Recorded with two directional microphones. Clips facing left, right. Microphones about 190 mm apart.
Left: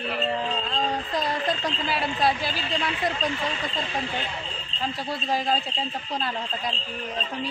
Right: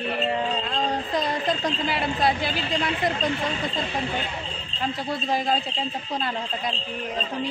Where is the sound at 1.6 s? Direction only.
15° right (ahead or behind).